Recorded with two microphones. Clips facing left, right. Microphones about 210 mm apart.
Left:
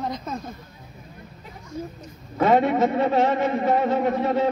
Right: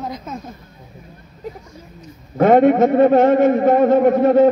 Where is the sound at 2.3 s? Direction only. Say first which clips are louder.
Right 7 dB; 50° right (ahead or behind).